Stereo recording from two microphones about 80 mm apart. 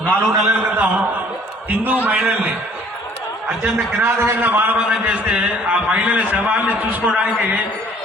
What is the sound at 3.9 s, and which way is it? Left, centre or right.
A man's voice, right.